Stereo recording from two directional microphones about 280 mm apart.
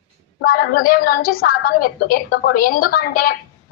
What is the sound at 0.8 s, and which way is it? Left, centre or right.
Speech, left.